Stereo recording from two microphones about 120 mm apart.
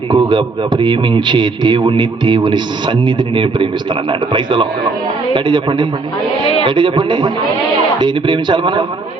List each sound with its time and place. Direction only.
0.1 s a man's voice: 40° right (ahead or behind)